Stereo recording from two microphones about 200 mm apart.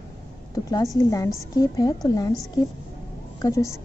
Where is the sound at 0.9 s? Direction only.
15° left (ahead or behind).